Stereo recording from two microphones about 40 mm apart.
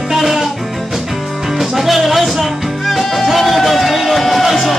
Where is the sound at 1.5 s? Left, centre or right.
Centre.